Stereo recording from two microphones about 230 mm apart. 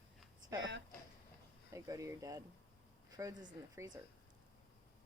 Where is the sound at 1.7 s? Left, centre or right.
Centre.